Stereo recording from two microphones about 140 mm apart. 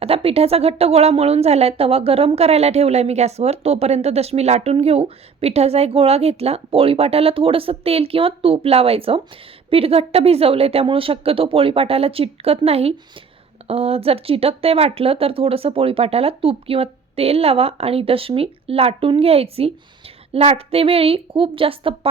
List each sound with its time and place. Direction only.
0.0 s a woman's voice: 45° right (ahead or behind)